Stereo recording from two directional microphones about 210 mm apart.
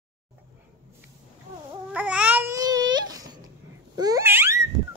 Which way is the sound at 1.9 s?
5° right (ahead or behind).